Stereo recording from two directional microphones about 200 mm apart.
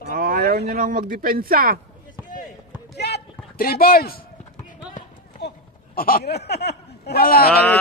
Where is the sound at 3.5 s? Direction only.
50° left (ahead or behind).